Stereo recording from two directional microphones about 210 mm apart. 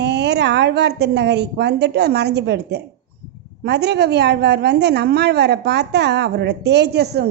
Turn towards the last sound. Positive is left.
turn(degrees=-50)  # may be behind; listen again after turning